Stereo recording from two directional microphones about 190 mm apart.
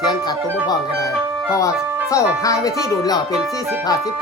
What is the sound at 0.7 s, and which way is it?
Music, 15° left (ahead or behind).